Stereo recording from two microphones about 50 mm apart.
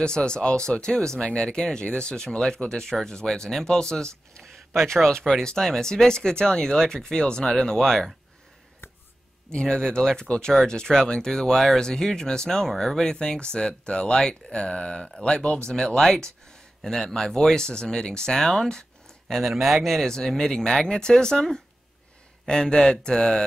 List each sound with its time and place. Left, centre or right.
0.0 s speech: centre
9.5 s speech: centre
19.3 s speech: centre